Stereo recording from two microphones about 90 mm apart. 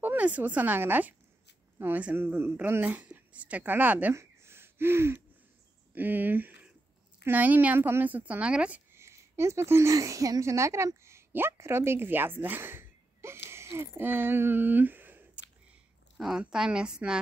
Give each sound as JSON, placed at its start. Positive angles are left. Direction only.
{"t": 0.0, "sound": "speech", "side_deg": -20}
{"t": 4.1, "sound": "gasp", "side_deg": -30}
{"t": 5.9, "sound": "speech", "side_deg": -20}
{"t": 8.9, "sound": "speech", "side_deg": -30}
{"t": 16.2, "sound": "a woman's voice", "side_deg": -5}